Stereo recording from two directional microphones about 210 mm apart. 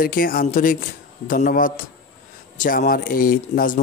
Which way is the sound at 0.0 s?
40° left (ahead or behind).